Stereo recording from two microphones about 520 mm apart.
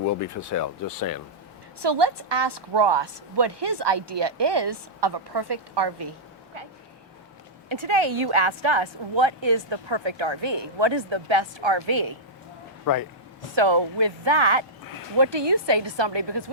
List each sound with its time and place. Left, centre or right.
0.0 s speech: left
1.8 s a woman's voice: right
7.7 s speech: right
12.8 s speech: left
13.6 s a woman's voice: right